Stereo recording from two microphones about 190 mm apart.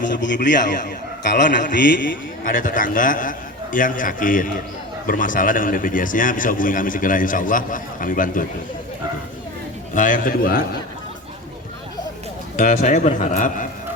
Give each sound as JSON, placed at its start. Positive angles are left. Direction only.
{"t": 0.1, "sound": "a man's voice", "side_deg": 70}
{"t": 2.4, "sound": "speech", "side_deg": 45}
{"t": 9.9, "sound": "speech", "side_deg": 45}
{"t": 12.5, "sound": "speech", "side_deg": 40}